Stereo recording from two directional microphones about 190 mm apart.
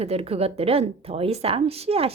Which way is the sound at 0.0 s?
30° right (ahead or behind).